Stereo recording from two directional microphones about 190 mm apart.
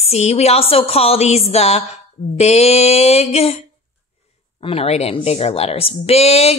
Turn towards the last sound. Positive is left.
turn(degrees=35)  # may be behind; listen again after turning